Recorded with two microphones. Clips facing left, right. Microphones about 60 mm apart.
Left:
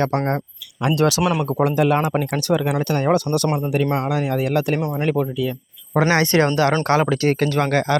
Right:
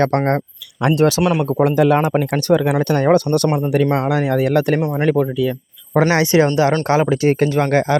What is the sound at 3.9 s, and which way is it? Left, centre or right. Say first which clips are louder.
Speech: right 4 dB; right.